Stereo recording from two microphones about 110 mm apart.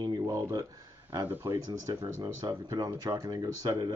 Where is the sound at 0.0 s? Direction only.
35° right (ahead or behind).